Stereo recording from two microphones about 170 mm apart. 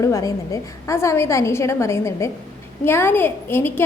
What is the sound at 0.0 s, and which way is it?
A woman's voice, 20° left (ahead or behind).